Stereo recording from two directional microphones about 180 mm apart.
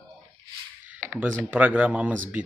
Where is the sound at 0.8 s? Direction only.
10° right (ahead or behind).